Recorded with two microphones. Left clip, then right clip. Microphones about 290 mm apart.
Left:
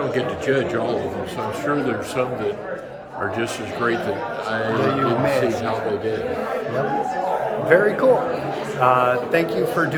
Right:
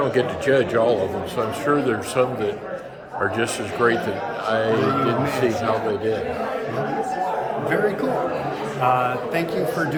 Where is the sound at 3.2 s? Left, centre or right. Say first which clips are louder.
Right 2 dB; centre.